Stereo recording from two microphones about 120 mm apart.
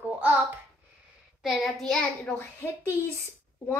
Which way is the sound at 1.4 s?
Centre (ahead or behind).